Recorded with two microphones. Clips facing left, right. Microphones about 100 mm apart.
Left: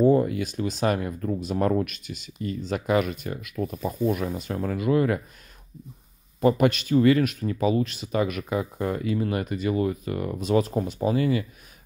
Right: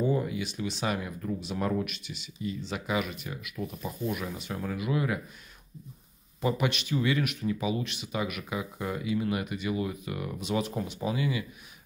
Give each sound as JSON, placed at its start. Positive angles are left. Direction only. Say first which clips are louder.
{"t": 0.0, "sound": "speech", "louder": "left 9 dB", "side_deg": 50}
{"t": 6.4, "sound": "speech", "louder": "left 8 dB", "side_deg": 45}